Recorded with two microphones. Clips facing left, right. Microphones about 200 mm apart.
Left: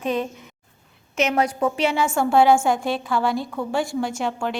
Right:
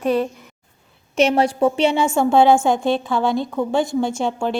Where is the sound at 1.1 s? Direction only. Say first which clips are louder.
Right 5 dB; 30° right (ahead or behind).